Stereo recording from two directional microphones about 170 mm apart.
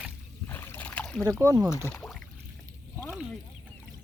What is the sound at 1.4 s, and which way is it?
Speech, 20° right (ahead or behind).